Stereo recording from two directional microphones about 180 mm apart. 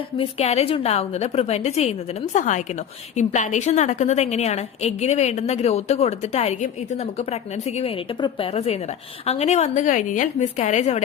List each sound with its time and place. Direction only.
0.2 s a woman's voice: 35° left (ahead or behind)